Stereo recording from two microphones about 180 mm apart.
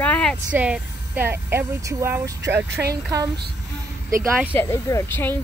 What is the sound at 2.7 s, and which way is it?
Speech, 65° right (ahead or behind).